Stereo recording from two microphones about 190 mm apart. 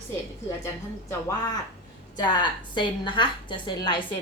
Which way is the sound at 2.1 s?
20° left (ahead or behind).